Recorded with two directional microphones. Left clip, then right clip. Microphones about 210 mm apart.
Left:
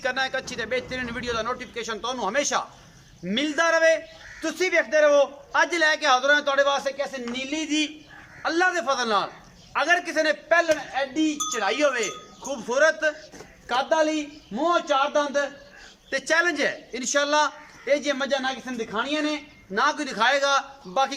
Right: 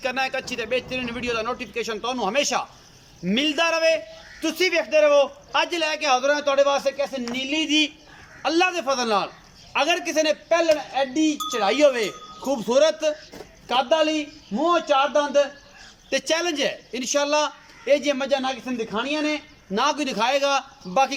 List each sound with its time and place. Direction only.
0.0 s a man's voice: 5° right (ahead or behind)